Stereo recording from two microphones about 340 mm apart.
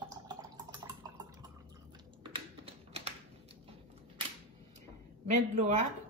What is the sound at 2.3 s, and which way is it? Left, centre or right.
Typing, centre.